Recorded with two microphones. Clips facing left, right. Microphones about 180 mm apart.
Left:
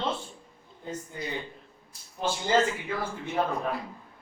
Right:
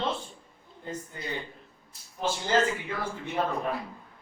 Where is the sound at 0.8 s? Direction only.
5° left (ahead or behind).